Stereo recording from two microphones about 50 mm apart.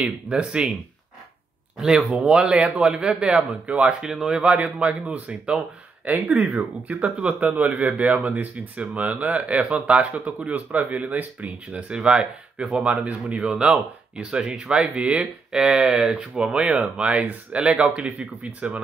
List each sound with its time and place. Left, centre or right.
0.0 s speech: right
2.1 s speech: centre
4.0 s speech: centre
12.8 s speech: right